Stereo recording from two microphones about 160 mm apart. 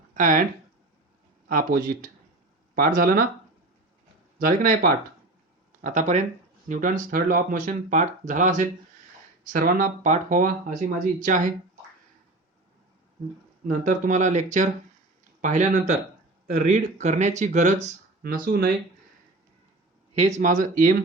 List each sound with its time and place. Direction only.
0.1 s speech: 55° right (ahead or behind)
1.5 s speech: 60° right (ahead or behind)
4.4 s speech: 55° right (ahead or behind)
13.7 s speech: 55° right (ahead or behind)
20.1 s speech: 45° right (ahead or behind)